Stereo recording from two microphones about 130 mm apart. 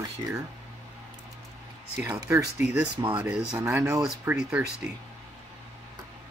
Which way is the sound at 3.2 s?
5° right (ahead or behind).